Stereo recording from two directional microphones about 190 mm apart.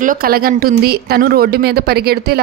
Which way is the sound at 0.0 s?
50° right (ahead or behind).